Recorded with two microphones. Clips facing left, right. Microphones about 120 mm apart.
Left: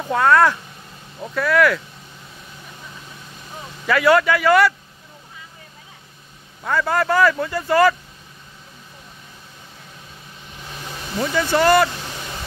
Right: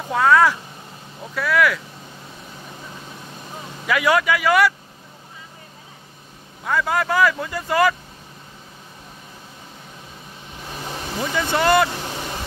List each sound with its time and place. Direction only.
0.1 s speech: 5° right (ahead or behind)
3.8 s speech: 10° right (ahead or behind)
6.6 s speech: 5° right (ahead or behind)
11.3 s speech: 20° right (ahead or behind)